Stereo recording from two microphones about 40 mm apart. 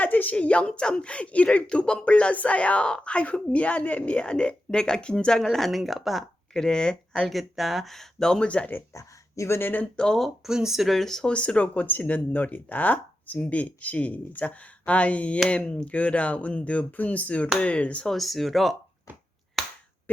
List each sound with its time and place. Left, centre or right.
0.0 s a woman's voice: left
0.3 s speech: left
4.2 s speech: left
5.4 s speech: centre
6.5 s speech: centre
7.3 s speech: centre
7.9 s speech: centre
8.4 s speech: left
9.5 s speech: left
9.8 s speech: centre
10.4 s speech: centre
10.8 s speech: centre
11.3 s speech: left
18.1 s speech: centre